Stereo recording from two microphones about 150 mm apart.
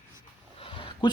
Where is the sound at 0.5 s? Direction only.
35° left (ahead or behind).